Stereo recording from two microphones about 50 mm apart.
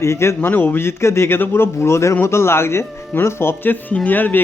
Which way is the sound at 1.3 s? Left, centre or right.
Left.